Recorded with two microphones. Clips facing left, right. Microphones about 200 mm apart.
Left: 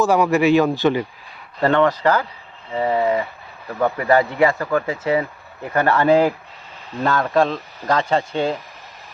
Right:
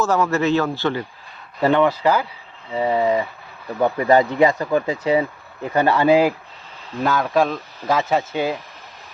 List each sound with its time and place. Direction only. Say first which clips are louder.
0.0 s a man's voice: left 3 dB; 15° left (ahead or behind)
1.6 s speech: even; 10° right (ahead or behind)
7.0 s speech: left 1 dB; centre (ahead or behind)